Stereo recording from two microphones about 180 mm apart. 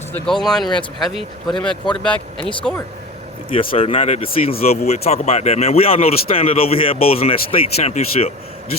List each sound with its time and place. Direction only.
0.1 s speech: centre (ahead or behind)
3.5 s speech: 30° left (ahead or behind)